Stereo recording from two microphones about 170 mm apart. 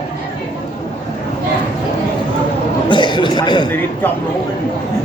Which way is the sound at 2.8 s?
25° left (ahead or behind).